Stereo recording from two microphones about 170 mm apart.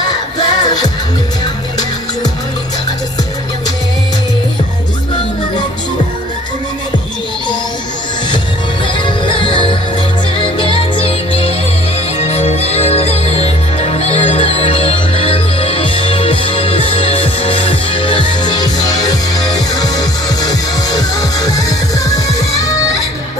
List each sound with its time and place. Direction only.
0.4 s music: 25° left (ahead or behind)
8.8 s music: 30° left (ahead or behind)